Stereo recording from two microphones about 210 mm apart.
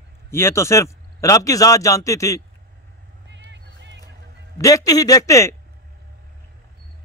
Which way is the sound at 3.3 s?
55° right (ahead or behind).